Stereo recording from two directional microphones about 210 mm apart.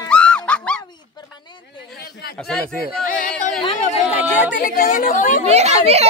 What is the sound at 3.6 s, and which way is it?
Speech, 30° left (ahead or behind).